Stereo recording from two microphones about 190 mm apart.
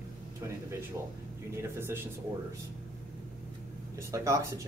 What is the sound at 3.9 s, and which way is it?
Speech, 15° right (ahead or behind).